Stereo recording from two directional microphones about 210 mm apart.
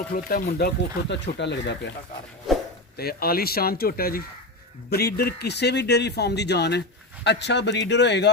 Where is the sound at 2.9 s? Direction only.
45° left (ahead or behind).